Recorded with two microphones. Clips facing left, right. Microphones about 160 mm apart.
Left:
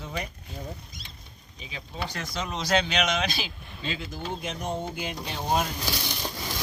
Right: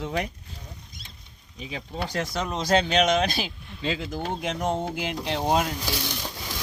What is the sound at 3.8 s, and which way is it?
Speech, 90° right.